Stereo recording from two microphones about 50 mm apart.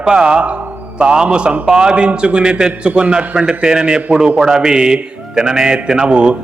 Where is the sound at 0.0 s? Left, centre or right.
Centre.